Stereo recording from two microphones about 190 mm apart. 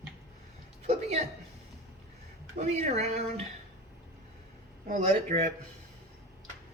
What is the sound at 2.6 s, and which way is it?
Speech, 35° right (ahead or behind).